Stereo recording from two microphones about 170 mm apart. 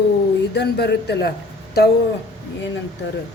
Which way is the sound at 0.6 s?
75° left (ahead or behind).